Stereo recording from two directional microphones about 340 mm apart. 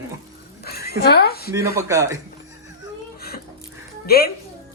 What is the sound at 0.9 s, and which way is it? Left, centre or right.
Speech, left.